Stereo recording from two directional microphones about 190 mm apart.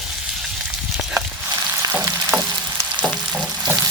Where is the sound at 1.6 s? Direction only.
15° right (ahead or behind).